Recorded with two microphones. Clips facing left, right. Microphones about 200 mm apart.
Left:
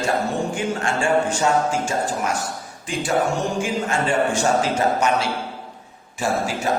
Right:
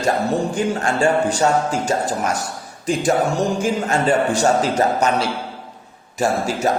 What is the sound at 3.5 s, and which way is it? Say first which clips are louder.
A man's voice: right 3 dB; 40° right (ahead or behind).